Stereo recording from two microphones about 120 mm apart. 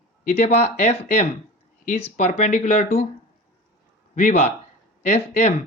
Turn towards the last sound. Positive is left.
turn(degrees=75)  # may be behind; listen again after turning